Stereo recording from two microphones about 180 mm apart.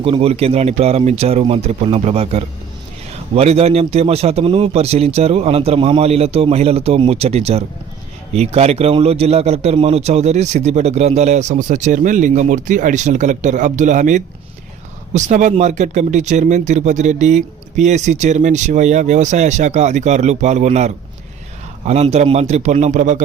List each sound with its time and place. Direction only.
0.0 s a man's voice: 30° right (ahead or behind)